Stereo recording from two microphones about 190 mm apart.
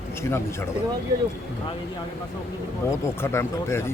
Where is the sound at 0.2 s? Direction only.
15° left (ahead or behind).